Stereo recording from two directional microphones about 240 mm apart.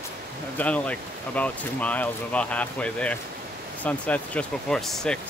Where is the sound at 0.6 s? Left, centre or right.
Centre.